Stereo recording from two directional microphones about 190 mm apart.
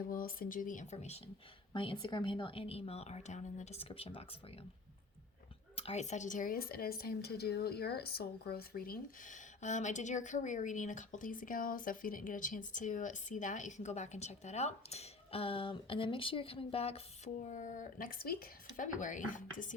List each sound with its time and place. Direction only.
0.1 s a woman's voice: 50° left (ahead or behind); by 4.4 s 30° left (ahead or behind)
5.7 s a woman's voice: 35° left (ahead or behind)